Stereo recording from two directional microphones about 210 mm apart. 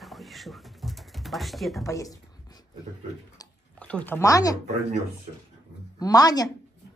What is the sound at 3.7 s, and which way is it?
Speech, 5° left (ahead or behind).